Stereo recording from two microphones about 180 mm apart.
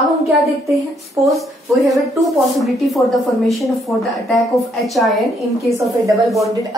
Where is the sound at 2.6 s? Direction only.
Centre (ahead or behind).